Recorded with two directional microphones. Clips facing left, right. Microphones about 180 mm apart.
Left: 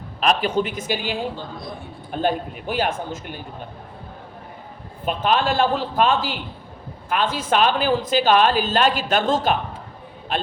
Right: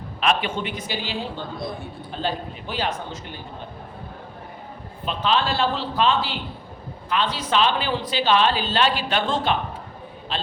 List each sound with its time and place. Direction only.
0.2 s speech: 40° left (ahead or behind)
2.2 s speech: 50° left (ahead or behind)
5.0 s speech: 50° left (ahead or behind)
10.3 s a man's voice: 50° left (ahead or behind)